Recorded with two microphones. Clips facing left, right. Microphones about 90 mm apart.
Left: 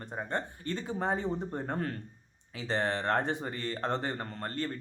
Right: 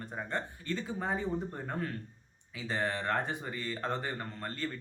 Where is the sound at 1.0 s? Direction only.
45° left (ahead or behind).